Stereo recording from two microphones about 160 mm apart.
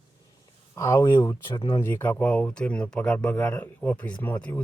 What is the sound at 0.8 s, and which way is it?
Speech, 20° left (ahead or behind).